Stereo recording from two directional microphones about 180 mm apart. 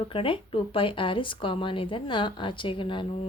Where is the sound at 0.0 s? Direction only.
30° left (ahead or behind).